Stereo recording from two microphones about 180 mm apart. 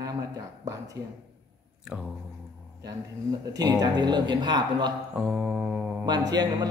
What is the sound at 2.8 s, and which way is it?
Speech, 20° right (ahead or behind).